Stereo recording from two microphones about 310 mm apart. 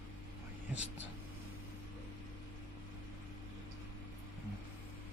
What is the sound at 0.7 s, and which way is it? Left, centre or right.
Speech, right.